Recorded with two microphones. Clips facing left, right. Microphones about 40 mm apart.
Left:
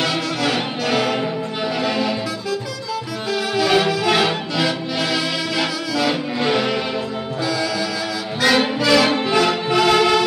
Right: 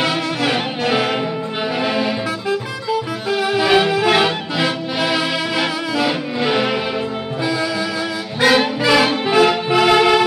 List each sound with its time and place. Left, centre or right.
0.0 s music: right
7.4 s music: right